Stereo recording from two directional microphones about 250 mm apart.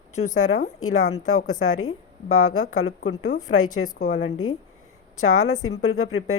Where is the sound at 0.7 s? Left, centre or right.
Left.